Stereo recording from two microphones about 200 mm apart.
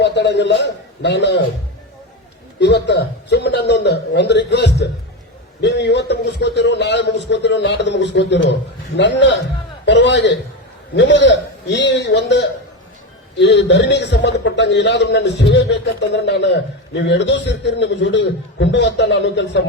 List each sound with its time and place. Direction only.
0.0 s a man's voice: 60° left (ahead or behind)
2.6 s a man's voice: 60° left (ahead or behind)